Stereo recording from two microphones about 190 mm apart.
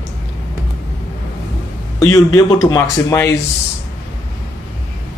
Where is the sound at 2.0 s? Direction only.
15° left (ahead or behind).